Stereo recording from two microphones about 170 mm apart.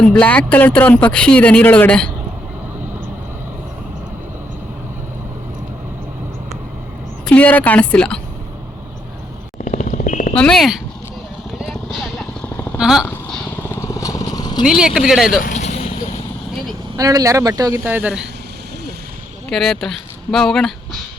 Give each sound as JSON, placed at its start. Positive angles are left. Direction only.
{"t": 0.0, "sound": "speech", "side_deg": 5}
{"t": 7.3, "sound": "speech", "side_deg": 10}
{"t": 9.6, "sound": "a sound", "side_deg": 45}
{"t": 10.3, "sound": "speech", "side_deg": 5}
{"t": 11.5, "sound": "vehicle", "side_deg": 0}
{"t": 12.8, "sound": "speech", "side_deg": -5}
{"t": 13.6, "sound": "vehicle", "side_deg": 15}
{"t": 14.6, "sound": "speech", "side_deg": -5}
{"t": 15.4, "sound": "vehicle", "side_deg": 50}
{"t": 17.0, "sound": "speech", "side_deg": -20}
{"t": 17.8, "sound": "speech", "side_deg": -10}
{"t": 19.5, "sound": "speech", "side_deg": 0}